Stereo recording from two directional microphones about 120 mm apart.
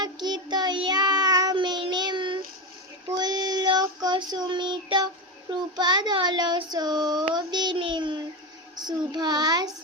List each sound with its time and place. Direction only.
0.0 s child singing: 35° right (ahead or behind)